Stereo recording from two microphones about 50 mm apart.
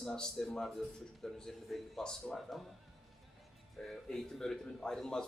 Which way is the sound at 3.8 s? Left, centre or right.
Centre.